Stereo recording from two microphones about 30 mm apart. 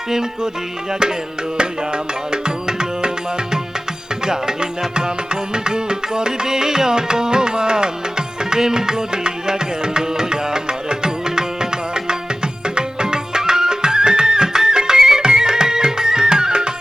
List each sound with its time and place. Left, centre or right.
0.1 s music: right
8.4 s tabla: right
12.6 s music: right